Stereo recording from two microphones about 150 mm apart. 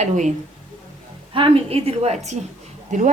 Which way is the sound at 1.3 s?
35° right (ahead or behind).